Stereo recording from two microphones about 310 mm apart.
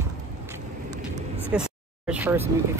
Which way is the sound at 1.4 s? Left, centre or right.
Centre.